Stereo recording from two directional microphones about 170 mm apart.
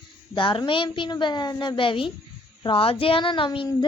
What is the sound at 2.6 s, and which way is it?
Speech, 35° left (ahead or behind).